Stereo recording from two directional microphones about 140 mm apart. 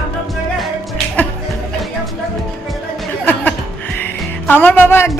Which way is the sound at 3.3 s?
10° left (ahead or behind).